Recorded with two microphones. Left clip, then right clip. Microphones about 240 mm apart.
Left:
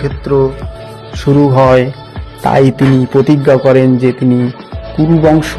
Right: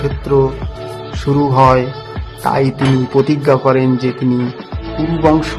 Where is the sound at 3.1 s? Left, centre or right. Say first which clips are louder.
Left 3 dB; centre.